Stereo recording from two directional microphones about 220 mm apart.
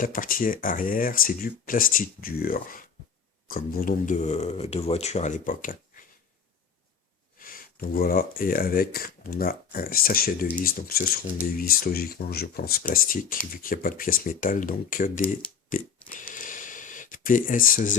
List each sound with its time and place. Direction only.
0.0 s speech: 40° left (ahead or behind)
7.3 s speech: 40° left (ahead or behind)
15.2 s speech: 5° left (ahead or behind)
16.3 s a sound: 35° left (ahead or behind)